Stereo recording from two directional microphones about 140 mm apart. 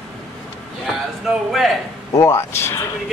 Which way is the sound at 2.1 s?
20° left (ahead or behind).